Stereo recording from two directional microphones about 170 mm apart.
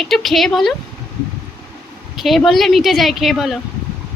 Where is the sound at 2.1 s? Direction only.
Centre (ahead or behind).